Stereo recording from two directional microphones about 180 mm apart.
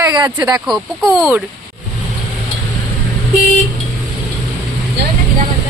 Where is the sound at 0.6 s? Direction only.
Centre (ahead or behind).